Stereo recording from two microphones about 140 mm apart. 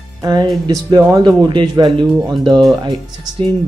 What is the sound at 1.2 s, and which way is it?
Speech, 30° right (ahead or behind).